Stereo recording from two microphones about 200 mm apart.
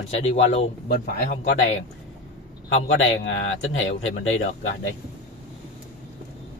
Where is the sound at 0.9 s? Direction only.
50° left (ahead or behind).